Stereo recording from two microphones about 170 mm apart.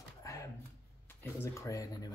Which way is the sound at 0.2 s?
20° left (ahead or behind).